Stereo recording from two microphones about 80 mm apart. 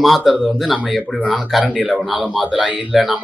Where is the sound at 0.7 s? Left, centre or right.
Centre.